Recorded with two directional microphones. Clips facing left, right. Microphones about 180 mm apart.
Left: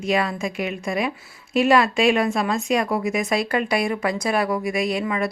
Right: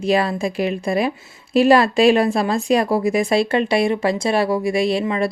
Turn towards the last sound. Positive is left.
turn(degrees=-30)  # may be behind; listen again after turning